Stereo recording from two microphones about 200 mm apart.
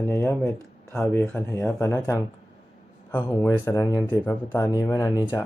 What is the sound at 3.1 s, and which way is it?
Speech, 10° left (ahead or behind).